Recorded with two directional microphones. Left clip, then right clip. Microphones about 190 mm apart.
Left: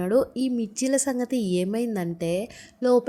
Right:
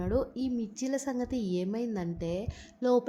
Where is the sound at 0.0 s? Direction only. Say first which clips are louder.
Left 9 dB; 15° left (ahead or behind).